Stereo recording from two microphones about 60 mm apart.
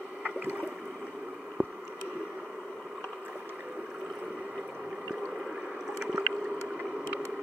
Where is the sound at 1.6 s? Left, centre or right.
Right.